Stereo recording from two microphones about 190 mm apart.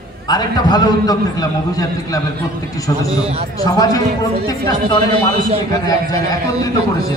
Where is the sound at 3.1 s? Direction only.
30° right (ahead or behind).